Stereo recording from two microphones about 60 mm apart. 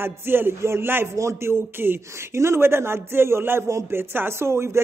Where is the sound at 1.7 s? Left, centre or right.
Right.